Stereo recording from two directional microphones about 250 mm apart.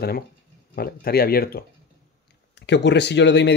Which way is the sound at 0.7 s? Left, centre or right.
Left.